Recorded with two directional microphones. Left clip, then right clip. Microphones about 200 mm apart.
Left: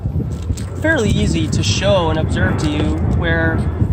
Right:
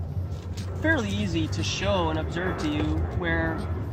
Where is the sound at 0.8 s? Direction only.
50° left (ahead or behind).